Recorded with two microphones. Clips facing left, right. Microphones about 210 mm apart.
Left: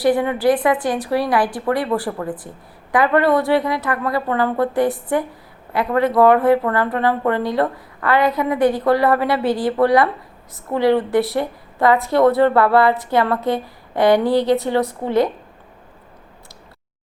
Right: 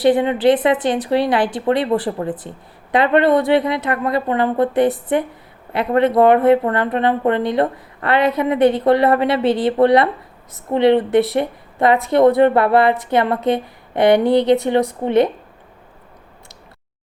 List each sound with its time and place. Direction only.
0.0 s speech: 20° right (ahead or behind)